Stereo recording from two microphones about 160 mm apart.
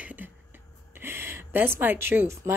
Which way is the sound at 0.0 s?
10° right (ahead or behind).